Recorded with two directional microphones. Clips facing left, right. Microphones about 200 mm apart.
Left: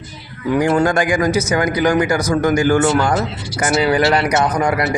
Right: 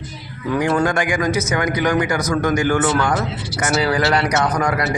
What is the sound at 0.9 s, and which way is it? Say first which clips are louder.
A man's voice: left 3 dB; 35° left (ahead or behind).